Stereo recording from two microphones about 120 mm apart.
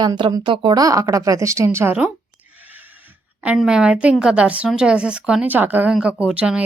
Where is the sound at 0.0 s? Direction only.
35° right (ahead or behind).